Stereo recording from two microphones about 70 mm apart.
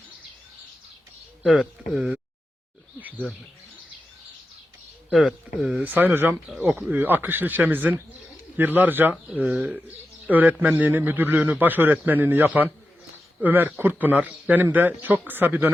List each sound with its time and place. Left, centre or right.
1.5 s speech: centre
5.1 s speech: centre
5.8 s a man's voice: right
9.2 s speech: centre
10.2 s a man's voice: right